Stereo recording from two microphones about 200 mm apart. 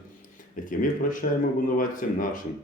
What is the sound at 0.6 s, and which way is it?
A man's voice, 40° left (ahead or behind).